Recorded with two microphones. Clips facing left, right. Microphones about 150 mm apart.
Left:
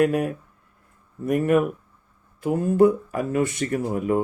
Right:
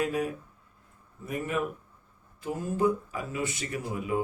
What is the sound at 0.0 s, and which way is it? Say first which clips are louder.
Speech: left 8 dB; 60° left (ahead or behind).